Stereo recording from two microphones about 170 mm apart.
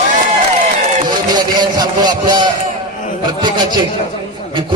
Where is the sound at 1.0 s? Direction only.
25° right (ahead or behind).